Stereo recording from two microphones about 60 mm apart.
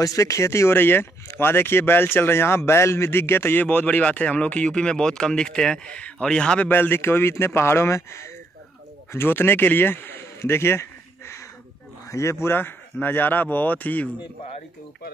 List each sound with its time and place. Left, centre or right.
0.0 s speech: left
3.6 s speech: left
6.6 s a man's voice: left